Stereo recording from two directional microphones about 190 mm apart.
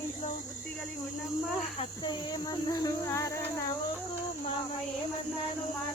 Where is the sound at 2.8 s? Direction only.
15° left (ahead or behind).